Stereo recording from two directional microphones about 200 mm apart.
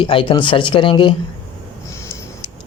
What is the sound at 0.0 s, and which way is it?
Speech, 25° left (ahead or behind).